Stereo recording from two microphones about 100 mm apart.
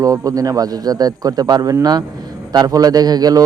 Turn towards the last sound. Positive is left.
turn(degrees=-40)  # may be behind; listen again after turning